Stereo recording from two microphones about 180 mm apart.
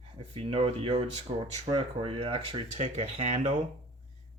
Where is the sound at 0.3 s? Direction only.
30° right (ahead or behind).